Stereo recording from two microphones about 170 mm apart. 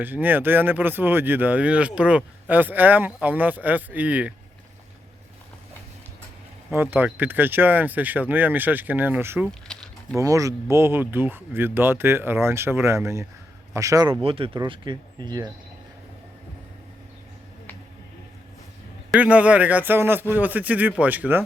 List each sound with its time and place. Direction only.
0.0 s speech: 10° right (ahead or behind)
6.7 s speech: 10° right (ahead or behind)
9.6 s a sound: 5° left (ahead or behind)
10.2 s speech: 20° right (ahead or behind)
19.1 s speech: 10° right (ahead or behind)